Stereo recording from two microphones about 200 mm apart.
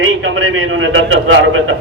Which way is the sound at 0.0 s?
75° right (ahead or behind).